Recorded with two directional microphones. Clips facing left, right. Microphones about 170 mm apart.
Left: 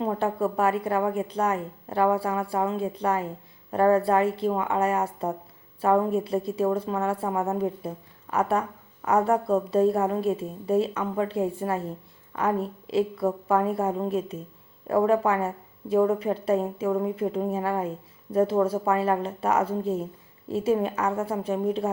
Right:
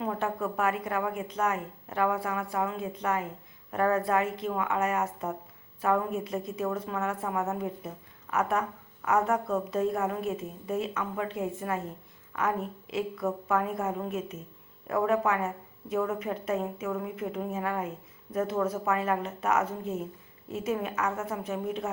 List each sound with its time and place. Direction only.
0.0 s a woman's voice: 30° left (ahead or behind)